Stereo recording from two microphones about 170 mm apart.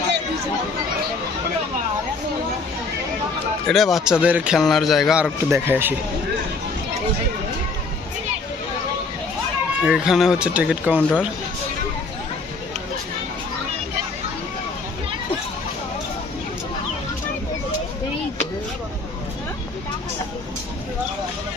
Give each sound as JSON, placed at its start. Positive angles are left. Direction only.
{"t": 3.7, "sound": "a man's voice", "side_deg": 0}
{"t": 9.8, "sound": "a man's voice", "side_deg": -5}